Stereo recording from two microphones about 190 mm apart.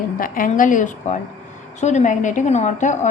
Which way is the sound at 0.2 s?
45° left (ahead or behind).